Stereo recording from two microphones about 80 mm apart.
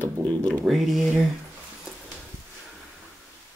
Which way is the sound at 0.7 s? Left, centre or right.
Centre.